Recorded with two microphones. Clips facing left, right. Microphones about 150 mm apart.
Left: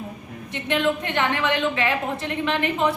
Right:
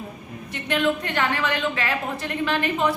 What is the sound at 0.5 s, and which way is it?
A woman's voice, 20° left (ahead or behind).